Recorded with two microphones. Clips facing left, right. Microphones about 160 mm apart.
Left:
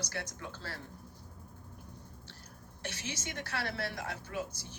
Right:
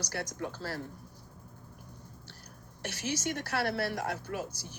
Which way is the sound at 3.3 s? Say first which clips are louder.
Right 6 dB; 40° right (ahead or behind).